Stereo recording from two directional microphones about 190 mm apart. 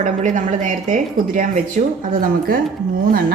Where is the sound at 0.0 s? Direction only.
40° right (ahead or behind).